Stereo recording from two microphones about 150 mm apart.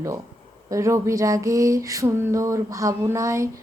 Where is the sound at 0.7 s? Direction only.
20° right (ahead or behind).